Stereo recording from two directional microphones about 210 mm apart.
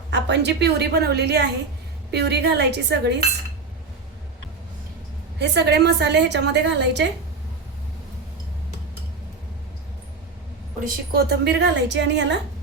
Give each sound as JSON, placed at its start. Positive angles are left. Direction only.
{"t": 0.1, "sound": "a woman's voice", "side_deg": -55}
{"t": 5.4, "sound": "a woman's voice", "side_deg": -55}
{"t": 10.8, "sound": "a woman's voice", "side_deg": -50}